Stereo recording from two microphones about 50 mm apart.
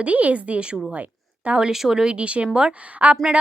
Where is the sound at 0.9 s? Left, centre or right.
Right.